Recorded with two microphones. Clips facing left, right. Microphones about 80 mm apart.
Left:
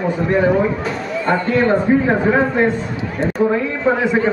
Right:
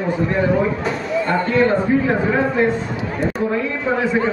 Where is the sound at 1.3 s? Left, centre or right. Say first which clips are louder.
Left 2 dB; left.